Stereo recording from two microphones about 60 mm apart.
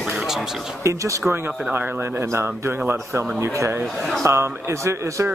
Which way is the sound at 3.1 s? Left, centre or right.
Right.